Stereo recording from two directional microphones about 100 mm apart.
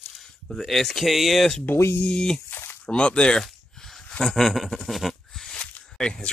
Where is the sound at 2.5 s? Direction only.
20° left (ahead or behind).